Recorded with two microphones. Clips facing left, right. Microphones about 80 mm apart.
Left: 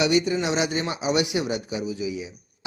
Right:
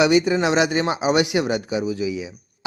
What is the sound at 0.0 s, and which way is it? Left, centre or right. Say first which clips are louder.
A man's voice: right 5 dB; right.